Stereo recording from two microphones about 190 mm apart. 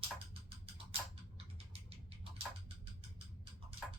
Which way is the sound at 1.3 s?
30° right (ahead or behind).